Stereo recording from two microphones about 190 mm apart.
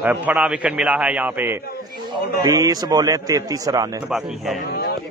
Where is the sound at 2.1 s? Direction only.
20° right (ahead or behind).